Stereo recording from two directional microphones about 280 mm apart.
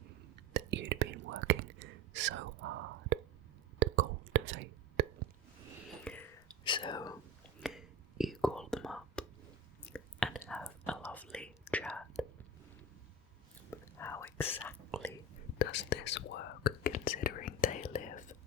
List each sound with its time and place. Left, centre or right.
0.3 s whispering: right
3.8 s whispering: right
6.1 s whispering: centre
6.7 s whispering: centre
7.6 s whispering: centre
13.7 s whispering: centre
15.5 s whispering: left